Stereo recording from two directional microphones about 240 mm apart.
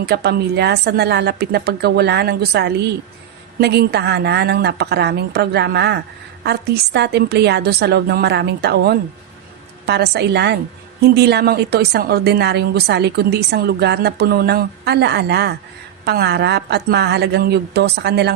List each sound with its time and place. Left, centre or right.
0.0 s speech: right